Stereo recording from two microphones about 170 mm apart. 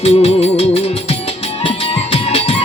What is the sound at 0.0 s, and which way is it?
Music, 35° left (ahead or behind).